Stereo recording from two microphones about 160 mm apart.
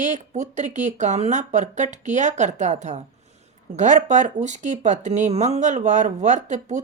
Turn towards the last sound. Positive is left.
turn(degrees=-50)  # may be behind; listen again after turning